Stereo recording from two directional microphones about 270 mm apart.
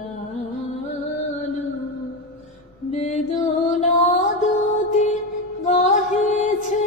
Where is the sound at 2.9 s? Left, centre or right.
Left.